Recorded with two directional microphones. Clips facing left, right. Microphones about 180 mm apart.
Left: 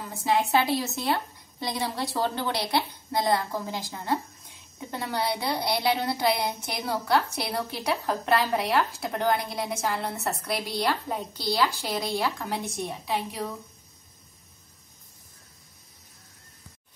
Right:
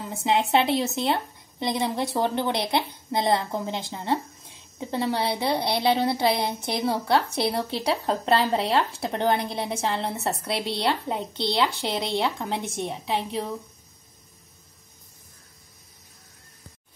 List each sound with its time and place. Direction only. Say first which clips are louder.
0.0 s a woman's voice: right 2 dB; 20° right (ahead or behind)